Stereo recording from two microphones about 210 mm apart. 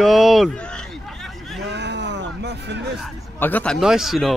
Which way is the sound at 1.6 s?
55° right (ahead or behind).